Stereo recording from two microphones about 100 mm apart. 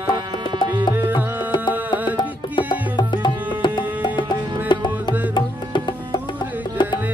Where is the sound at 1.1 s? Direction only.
50° left (ahead or behind).